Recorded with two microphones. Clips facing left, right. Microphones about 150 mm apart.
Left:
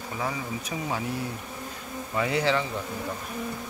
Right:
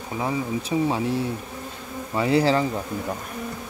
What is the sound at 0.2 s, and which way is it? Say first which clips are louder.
Speech: right 6 dB; 30° right (ahead or behind).